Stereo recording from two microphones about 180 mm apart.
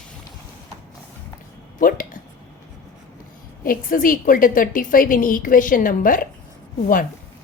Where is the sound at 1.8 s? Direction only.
50° left (ahead or behind).